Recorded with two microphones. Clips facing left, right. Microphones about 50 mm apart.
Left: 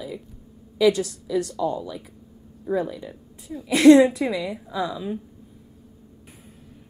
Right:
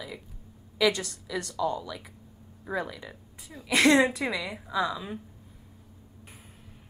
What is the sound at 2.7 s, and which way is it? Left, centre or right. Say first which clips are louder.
Speech: left 7 dB; right.